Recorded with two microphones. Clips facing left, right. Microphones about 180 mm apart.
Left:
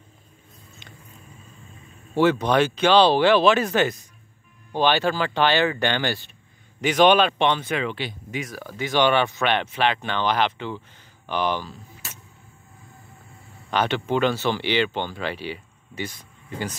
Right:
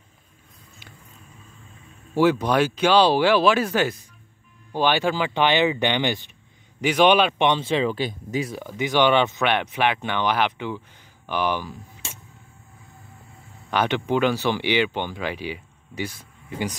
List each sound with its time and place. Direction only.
2.1 s speech: 10° right (ahead or behind); by 8.5 s 35° right (ahead or behind)
8.5 s speech: 15° right (ahead or behind)
13.7 s speech: 10° right (ahead or behind)